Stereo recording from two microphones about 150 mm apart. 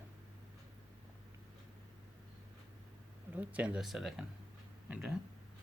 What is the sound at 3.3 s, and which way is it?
Speech, 10° right (ahead or behind).